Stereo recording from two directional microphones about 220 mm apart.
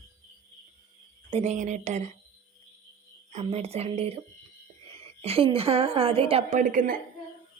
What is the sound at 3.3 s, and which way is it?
A woman's voice, 30° right (ahead or behind).